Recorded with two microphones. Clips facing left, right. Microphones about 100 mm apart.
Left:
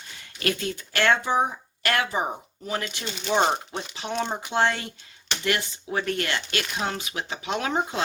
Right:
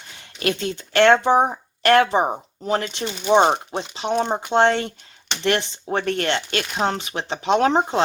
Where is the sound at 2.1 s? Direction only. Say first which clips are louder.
Right 7 dB; 35° right (ahead or behind).